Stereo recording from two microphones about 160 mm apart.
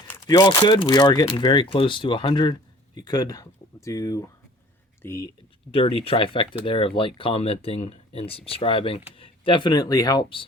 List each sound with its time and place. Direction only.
0.3 s speech: 25° left (ahead or behind)
5.7 s speech: 35° left (ahead or behind)